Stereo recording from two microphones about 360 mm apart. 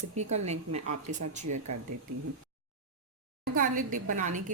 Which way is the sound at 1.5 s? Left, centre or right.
Right.